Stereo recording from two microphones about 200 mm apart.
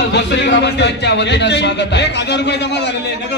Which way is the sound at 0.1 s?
60° left (ahead or behind).